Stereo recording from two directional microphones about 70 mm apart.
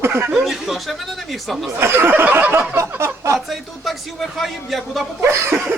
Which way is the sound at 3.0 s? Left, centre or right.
Right.